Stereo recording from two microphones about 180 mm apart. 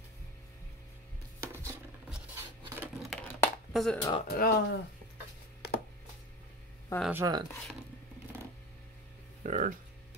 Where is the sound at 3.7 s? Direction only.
Centre (ahead or behind).